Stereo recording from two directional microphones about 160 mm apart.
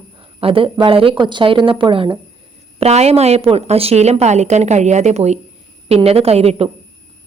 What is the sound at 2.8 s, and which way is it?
A woman's voice, 40° right (ahead or behind).